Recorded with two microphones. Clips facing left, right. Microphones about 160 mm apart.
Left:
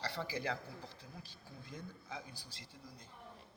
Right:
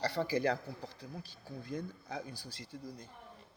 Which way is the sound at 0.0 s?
45° right (ahead or behind).